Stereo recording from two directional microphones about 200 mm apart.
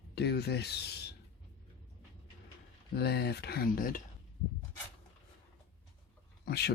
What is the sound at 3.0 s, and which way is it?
Speech, 55° left (ahead or behind).